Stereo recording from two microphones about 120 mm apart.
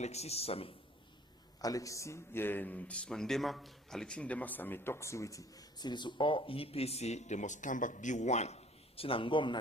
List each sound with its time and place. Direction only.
0.0 s a man's voice: 65° left (ahead or behind)
1.6 s speech: 30° left (ahead or behind)